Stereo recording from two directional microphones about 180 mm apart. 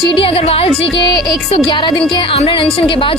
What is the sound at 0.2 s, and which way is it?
Speech, 30° left (ahead or behind).